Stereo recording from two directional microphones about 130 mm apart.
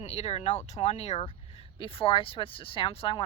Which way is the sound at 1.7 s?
45° left (ahead or behind).